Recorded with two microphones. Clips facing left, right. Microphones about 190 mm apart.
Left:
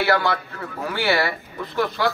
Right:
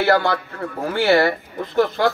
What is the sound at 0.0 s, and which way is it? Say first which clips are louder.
A man's voice: right 3 dB; 40° right (ahead or behind).